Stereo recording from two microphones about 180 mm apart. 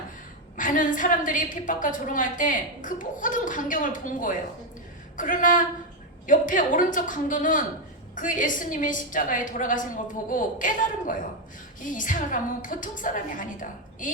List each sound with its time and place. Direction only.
0.5 s a woman's voice: 45° left (ahead or behind)